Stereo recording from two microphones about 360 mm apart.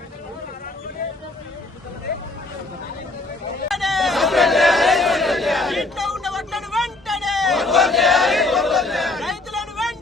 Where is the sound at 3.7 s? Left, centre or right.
Centre.